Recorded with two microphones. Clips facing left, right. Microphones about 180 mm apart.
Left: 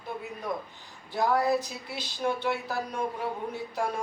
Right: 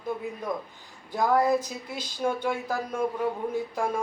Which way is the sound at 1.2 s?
45° right (ahead or behind).